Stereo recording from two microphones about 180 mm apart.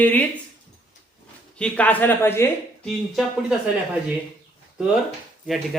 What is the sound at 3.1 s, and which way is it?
Speech, 5° right (ahead or behind).